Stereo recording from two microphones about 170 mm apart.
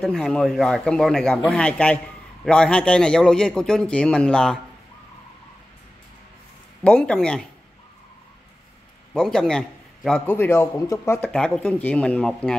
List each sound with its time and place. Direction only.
0.0 s a man's voice: centre (ahead or behind)
6.8 s a man's voice: 5° left (ahead or behind)
9.1 s a man's voice: centre (ahead or behind)